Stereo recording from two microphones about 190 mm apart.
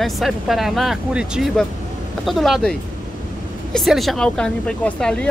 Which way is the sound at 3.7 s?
Centre (ahead or behind).